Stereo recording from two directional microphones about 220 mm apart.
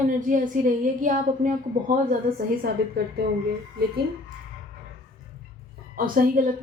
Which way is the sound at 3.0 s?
45° right (ahead or behind).